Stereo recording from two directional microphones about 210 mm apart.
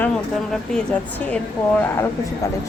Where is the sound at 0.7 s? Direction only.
5° left (ahead or behind).